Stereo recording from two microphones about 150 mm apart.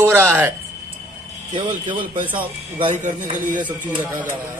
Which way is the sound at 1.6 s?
35° right (ahead or behind).